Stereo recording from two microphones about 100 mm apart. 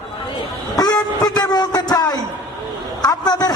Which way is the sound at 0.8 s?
40° left (ahead or behind).